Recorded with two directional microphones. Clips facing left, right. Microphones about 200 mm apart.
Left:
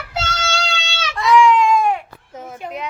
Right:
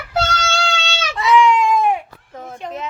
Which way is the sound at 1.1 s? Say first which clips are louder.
Left 1 dB; centre (ahead or behind).